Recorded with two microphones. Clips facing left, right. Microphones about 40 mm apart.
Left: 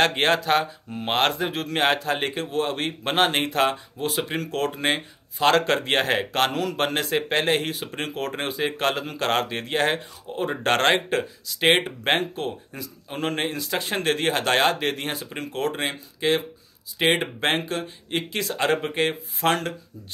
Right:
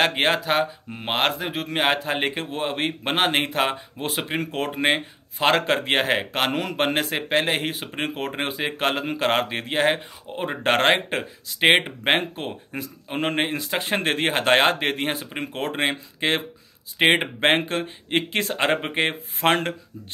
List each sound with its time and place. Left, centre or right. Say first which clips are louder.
0.0 s speech: even; centre
6.5 s speech: right 1 dB; right